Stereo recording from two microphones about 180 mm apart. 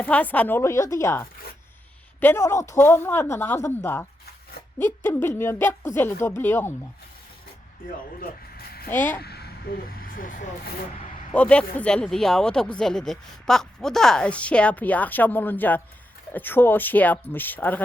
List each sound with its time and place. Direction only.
0.0 s speech: 10° left (ahead or behind)
5.0 s speech: 10° left (ahead or behind)
8.2 s music: 60° left (ahead or behind)
8.9 s speech: 10° left (ahead or behind)
9.2 s speech: 60° left (ahead or behind)
11.3 s speech: 5° left (ahead or behind)